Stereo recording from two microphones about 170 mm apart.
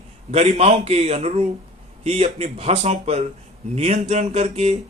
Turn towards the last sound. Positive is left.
turn(degrees=-40)  # may be behind; listen again after turning